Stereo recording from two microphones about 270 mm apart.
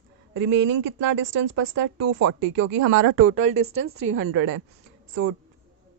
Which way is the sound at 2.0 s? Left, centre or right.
Right.